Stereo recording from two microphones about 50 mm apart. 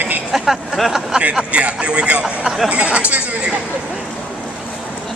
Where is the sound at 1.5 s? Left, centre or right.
Right.